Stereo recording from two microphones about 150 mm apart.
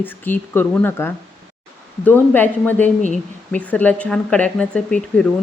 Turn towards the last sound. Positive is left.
turn(degrees=5)  # may be behind; listen again after turning